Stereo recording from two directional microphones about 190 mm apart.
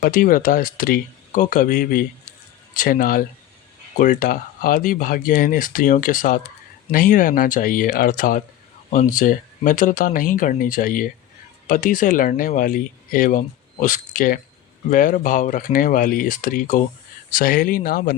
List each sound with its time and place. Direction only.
0.0 s speech: 50° left (ahead or behind)